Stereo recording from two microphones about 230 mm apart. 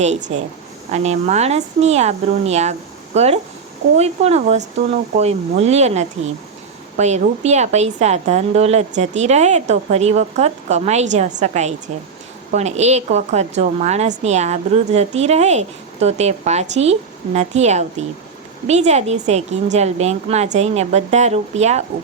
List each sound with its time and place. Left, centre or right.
0.0 s a woman's voice: right